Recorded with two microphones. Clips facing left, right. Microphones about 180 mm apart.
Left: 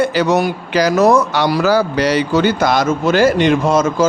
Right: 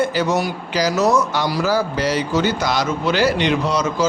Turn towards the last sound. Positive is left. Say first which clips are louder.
# left 5 dB
turn(degrees=50)  # may be behind; listen again after turning